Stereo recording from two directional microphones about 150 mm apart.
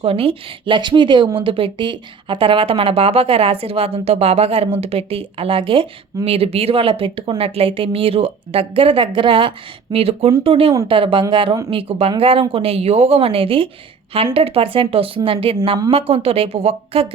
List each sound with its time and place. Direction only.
0.0 s speech: 40° right (ahead or behind)